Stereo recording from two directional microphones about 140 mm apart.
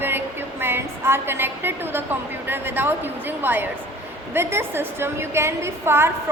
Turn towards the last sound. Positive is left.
turn(degrees=-15)  # may be behind; listen again after turning